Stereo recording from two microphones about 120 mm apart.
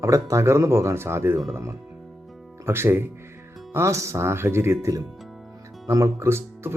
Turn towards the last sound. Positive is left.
turn(degrees=-20)  # may be behind; listen again after turning